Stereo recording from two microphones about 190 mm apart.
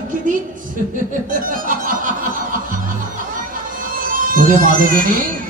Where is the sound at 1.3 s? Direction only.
45° right (ahead or behind).